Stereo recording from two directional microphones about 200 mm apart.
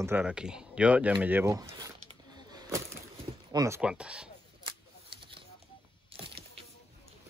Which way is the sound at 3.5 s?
15° right (ahead or behind).